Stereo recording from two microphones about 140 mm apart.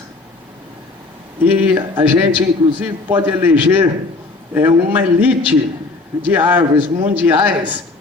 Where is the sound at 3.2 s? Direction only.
15° right (ahead or behind).